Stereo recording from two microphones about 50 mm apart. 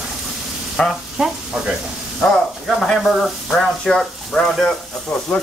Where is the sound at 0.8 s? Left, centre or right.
Left.